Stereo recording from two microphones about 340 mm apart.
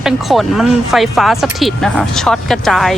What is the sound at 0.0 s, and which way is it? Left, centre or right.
Speech, centre.